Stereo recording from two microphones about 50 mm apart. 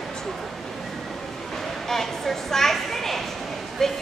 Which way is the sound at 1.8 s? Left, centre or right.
Centre.